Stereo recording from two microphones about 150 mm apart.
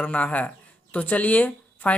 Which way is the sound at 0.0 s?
10° left (ahead or behind).